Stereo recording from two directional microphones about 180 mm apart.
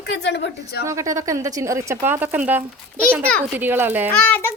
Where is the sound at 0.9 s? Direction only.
15° right (ahead or behind).